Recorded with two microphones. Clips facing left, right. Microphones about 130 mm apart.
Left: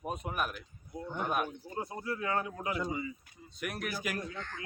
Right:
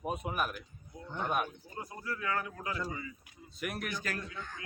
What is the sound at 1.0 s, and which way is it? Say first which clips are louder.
Speech: left 1 dB; 10° left (ahead or behind).